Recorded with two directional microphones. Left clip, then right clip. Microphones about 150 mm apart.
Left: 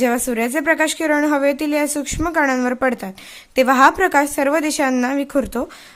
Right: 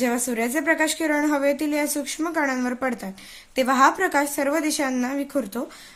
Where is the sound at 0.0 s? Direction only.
45° left (ahead or behind).